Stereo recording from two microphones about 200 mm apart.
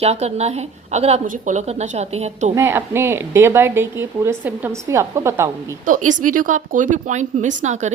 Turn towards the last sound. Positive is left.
turn(degrees=-35)  # may be behind; listen again after turning